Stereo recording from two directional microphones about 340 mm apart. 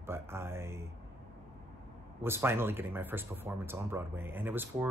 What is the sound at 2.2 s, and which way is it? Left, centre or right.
Speech, centre.